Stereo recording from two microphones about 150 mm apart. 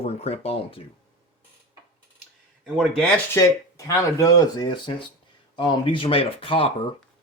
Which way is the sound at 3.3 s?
20° left (ahead or behind).